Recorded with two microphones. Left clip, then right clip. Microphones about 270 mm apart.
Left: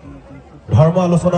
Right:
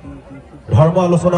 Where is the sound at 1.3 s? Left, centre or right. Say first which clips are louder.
Right 1 dB; right.